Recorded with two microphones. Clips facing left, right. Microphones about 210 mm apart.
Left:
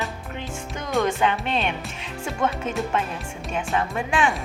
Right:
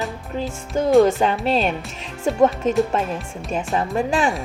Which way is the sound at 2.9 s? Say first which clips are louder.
Right 3 dB; 40° right (ahead or behind).